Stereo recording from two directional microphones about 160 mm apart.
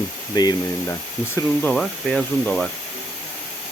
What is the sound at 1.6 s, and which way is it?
Speech, 5° left (ahead or behind).